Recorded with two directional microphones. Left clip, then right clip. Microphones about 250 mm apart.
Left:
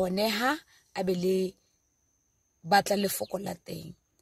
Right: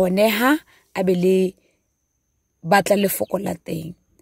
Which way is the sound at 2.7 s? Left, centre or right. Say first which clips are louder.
Right 8 dB; right.